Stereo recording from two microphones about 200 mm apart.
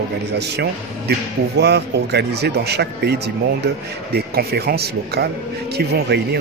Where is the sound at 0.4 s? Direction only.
55° right (ahead or behind).